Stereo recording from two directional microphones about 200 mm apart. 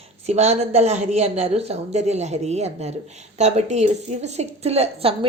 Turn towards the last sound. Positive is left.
turn(degrees=-30)  # may be behind; listen again after turning